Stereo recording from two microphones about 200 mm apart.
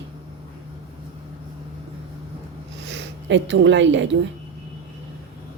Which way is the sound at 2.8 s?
60° right (ahead or behind).